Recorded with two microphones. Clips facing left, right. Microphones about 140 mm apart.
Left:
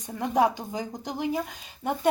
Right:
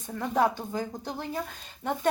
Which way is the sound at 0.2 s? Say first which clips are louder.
Left 2 dB; 15° left (ahead or behind).